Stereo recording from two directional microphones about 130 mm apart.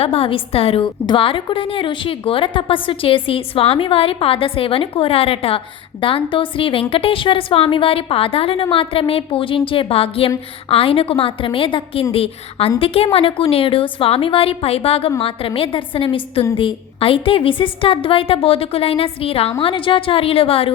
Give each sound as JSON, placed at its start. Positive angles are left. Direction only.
{"t": 0.0, "sound": "a woman's voice", "side_deg": 50}